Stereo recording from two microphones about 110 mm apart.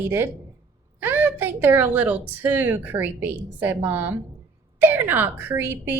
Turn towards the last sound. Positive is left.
turn(degrees=-20)  # may be behind; listen again after turning